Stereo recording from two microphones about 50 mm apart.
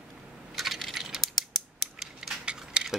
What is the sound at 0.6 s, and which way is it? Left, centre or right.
Typing, centre.